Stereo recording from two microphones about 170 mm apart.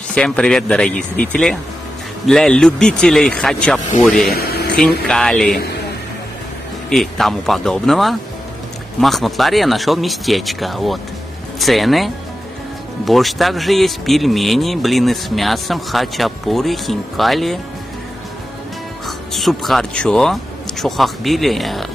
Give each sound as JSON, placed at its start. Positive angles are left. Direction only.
{"t": 0.1, "sound": "speech", "side_deg": 5}
{"t": 4.4, "sound": "a sound", "side_deg": 65}
{"t": 5.0, "sound": "speech", "side_deg": 5}
{"t": 6.9, "sound": "speech", "side_deg": 0}
{"t": 19.0, "sound": "speech", "side_deg": 0}